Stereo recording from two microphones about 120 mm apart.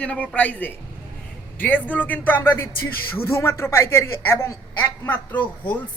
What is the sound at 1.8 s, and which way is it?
Speech, 15° left (ahead or behind).